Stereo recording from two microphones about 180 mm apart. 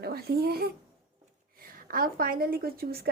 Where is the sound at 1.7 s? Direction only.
50° right (ahead or behind).